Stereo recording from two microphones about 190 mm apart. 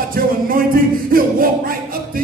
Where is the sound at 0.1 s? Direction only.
50° right (ahead or behind).